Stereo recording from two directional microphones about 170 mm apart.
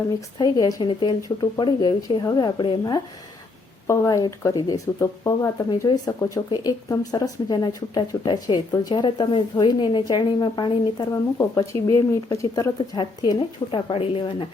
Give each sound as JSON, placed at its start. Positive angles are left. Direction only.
{"t": 0.3, "sound": "speech", "side_deg": 25}